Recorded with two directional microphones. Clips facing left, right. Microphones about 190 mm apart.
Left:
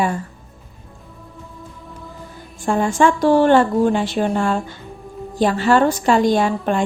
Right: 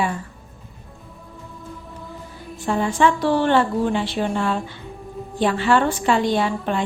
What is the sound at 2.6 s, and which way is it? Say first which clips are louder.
A woman's voice: left 3 dB; 45° left (ahead or behind).